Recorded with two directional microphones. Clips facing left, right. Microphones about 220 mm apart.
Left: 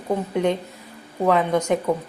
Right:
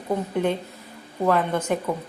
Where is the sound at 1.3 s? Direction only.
15° left (ahead or behind).